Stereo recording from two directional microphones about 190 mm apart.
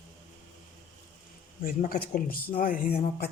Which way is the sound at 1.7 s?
45° left (ahead or behind).